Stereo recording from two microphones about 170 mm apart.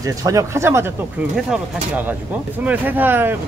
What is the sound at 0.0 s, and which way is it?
Speech, 20° right (ahead or behind).